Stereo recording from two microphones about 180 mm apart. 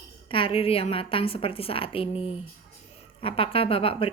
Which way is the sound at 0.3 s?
30° left (ahead or behind).